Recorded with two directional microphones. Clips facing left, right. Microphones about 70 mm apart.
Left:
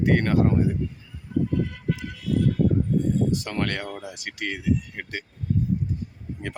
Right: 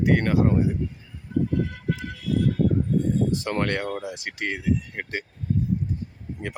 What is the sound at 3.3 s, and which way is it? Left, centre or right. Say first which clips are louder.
Speech: right 2 dB; right.